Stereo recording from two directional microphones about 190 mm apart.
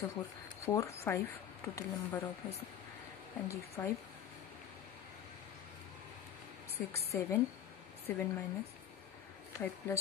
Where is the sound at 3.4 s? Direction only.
15° left (ahead or behind).